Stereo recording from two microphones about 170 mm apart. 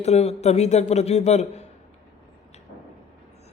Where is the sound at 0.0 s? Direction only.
40° left (ahead or behind).